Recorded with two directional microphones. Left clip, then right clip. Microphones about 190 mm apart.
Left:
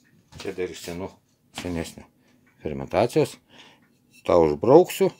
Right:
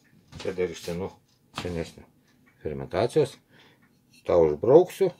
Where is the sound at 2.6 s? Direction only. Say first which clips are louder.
Left 4 dB; 35° left (ahead or behind).